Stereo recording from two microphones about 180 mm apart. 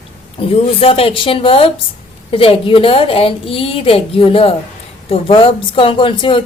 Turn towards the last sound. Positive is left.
turn(degrees=30)  # may be behind; listen again after turning